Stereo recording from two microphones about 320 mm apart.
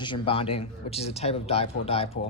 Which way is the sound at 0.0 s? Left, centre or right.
Centre.